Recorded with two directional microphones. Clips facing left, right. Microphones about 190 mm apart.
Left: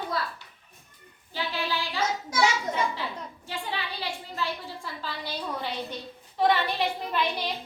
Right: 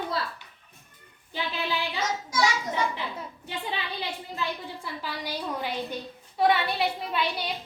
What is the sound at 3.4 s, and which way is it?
A woman's voice, 20° right (ahead or behind).